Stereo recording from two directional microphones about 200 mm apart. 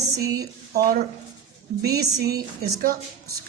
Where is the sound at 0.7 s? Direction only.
45° right (ahead or behind).